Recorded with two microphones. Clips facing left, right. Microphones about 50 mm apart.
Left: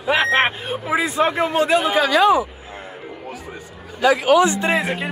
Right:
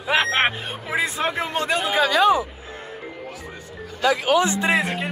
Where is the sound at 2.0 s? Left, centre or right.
Left.